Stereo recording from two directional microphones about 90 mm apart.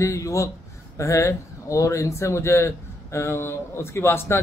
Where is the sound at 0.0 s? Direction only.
35° left (ahead or behind).